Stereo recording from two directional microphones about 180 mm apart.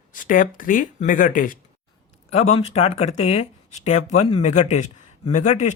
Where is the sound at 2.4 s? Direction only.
35° left (ahead or behind).